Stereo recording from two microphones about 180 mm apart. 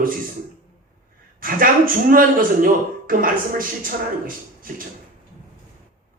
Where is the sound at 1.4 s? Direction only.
50° right (ahead or behind).